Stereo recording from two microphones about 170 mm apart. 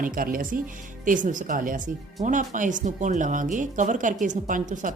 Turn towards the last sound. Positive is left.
turn(degrees=-50)  # may be behind; listen again after turning